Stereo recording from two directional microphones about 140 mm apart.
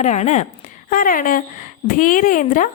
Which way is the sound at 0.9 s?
75° left (ahead or behind).